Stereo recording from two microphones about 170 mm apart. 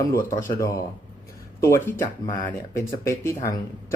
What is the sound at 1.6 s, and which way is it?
Speech, 15° left (ahead or behind).